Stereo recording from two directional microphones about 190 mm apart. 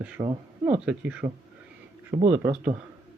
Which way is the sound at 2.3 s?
5° right (ahead or behind).